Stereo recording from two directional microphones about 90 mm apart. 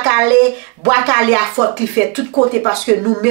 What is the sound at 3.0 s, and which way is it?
Speech, 25° right (ahead or behind).